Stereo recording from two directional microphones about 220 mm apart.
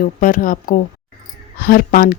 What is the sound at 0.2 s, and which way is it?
Speech, 40° left (ahead or behind).